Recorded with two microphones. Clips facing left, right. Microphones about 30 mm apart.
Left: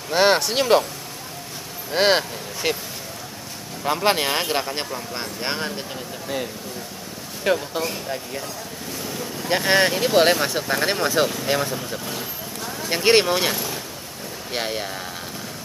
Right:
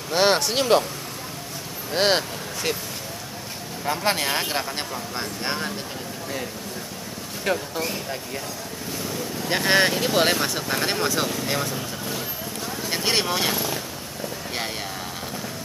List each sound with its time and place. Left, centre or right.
0.1 s speech: centre
1.9 s speech: centre
3.8 s speech: centre
8.9 s speech: centre
11.7 s vehicle: centre
13.0 s speech: left
13.3 s speech: centre